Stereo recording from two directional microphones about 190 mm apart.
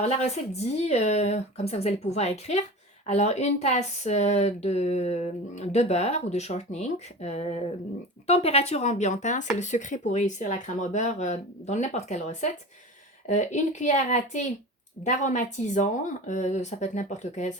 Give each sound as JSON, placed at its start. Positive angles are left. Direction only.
{"t": 0.0, "sound": "speech", "side_deg": 35}